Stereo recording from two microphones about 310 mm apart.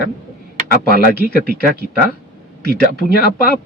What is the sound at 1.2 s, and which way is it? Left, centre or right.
Speech, left.